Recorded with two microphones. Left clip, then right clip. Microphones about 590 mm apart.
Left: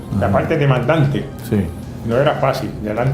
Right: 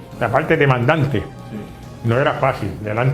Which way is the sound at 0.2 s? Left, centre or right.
Right.